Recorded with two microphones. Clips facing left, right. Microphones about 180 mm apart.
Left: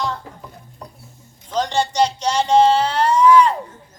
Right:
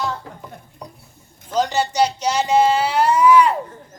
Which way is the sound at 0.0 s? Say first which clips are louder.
Even; 5° right (ahead or behind).